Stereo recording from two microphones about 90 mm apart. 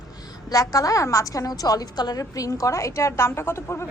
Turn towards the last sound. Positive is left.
turn(degrees=30)  # may be behind; listen again after turning